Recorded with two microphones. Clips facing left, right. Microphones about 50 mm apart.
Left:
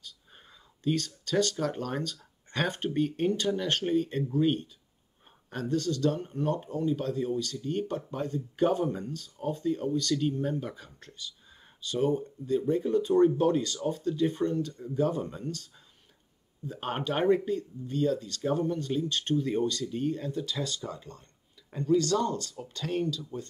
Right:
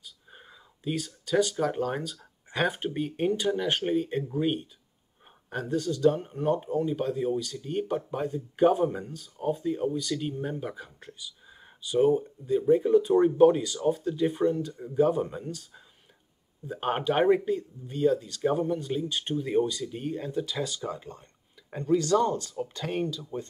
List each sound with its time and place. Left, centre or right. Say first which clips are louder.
0.0 s speech: right 2 dB; centre